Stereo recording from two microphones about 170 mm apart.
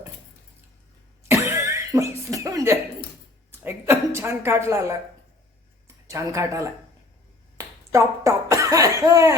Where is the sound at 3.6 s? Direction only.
15° right (ahead or behind).